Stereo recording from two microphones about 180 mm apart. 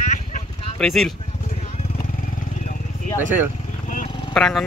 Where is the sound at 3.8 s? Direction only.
45° left (ahead or behind).